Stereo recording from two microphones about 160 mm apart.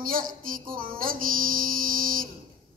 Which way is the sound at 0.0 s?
60° right (ahead or behind).